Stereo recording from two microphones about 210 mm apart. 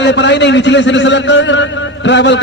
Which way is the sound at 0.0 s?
55° left (ahead or behind).